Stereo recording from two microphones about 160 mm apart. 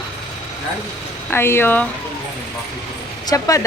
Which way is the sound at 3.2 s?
20° left (ahead or behind).